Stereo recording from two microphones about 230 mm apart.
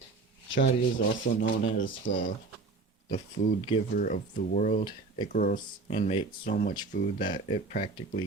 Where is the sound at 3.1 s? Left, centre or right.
Left.